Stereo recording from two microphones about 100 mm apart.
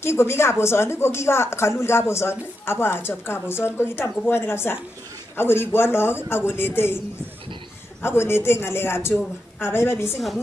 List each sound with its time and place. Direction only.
0.0 s speech: 25° left (ahead or behind)
8.0 s speech: 25° left (ahead or behind)